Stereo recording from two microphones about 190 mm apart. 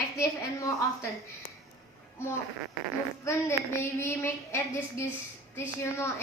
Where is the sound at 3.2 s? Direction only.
15° left (ahead or behind).